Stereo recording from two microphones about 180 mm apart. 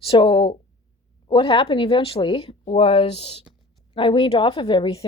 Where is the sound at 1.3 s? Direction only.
30° left (ahead or behind).